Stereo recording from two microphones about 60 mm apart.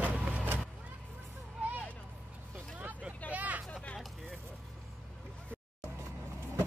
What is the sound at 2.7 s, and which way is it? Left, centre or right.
Vehicle, right.